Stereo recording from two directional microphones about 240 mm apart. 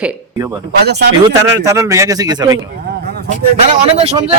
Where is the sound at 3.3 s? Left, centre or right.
Right.